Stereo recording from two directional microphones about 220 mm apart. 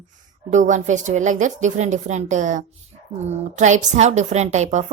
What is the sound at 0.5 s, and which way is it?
A woman's voice, 35° right (ahead or behind).